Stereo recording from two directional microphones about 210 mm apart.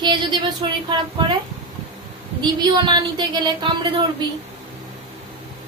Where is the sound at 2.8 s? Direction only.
20° right (ahead or behind).